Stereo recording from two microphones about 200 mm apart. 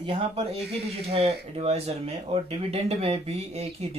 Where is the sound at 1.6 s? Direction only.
30° right (ahead or behind).